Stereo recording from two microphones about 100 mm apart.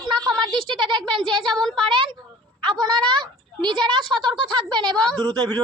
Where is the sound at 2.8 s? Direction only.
45° right (ahead or behind).